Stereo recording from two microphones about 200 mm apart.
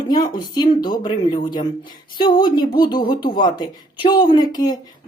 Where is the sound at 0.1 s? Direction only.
20° left (ahead or behind).